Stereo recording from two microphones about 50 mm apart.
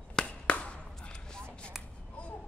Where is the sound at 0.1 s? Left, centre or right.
Centre.